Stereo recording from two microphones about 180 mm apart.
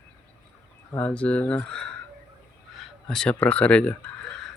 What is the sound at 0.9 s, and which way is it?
Speech, 10° left (ahead or behind).